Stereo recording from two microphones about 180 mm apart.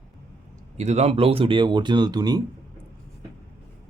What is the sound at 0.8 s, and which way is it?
Speech, 40° right (ahead or behind).